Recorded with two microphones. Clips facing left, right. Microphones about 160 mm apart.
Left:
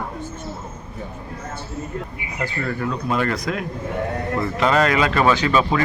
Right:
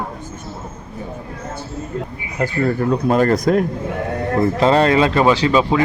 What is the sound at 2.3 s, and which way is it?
Speech, 40° right (ahead or behind).